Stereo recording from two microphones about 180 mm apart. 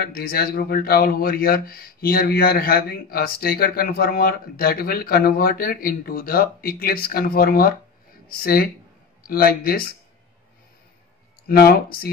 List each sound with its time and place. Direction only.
0.0 s speech: 55° left (ahead or behind)
11.4 s speech: 60° left (ahead or behind)